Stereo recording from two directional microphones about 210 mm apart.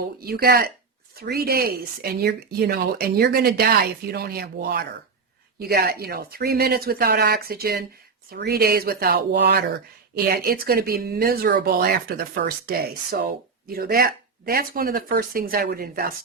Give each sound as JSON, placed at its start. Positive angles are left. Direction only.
{"t": 0.2, "sound": "speech", "side_deg": -45}